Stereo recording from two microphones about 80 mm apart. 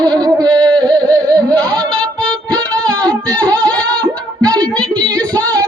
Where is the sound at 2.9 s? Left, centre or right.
Right.